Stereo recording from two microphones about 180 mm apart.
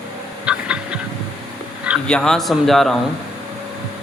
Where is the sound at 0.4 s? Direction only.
5° right (ahead or behind).